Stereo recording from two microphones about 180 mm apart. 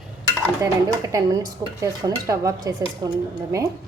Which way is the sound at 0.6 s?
15° right (ahead or behind).